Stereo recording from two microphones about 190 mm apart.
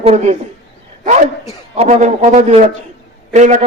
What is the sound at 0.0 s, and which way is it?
Speech, 35° right (ahead or behind).